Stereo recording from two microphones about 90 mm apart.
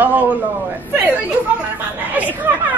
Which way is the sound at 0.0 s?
20° right (ahead or behind).